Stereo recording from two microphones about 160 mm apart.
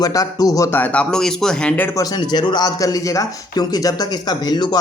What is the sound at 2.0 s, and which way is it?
A man's voice, 25° left (ahead or behind).